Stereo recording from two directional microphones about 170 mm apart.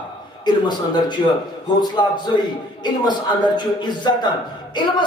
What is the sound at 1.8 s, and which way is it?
Speech, 25° left (ahead or behind).